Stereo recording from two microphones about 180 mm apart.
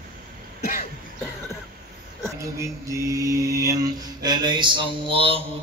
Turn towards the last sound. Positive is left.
turn(degrees=-30)  # may be behind; listen again after turning